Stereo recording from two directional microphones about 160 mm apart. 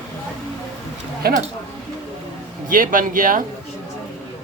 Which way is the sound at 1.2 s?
70° right (ahead or behind).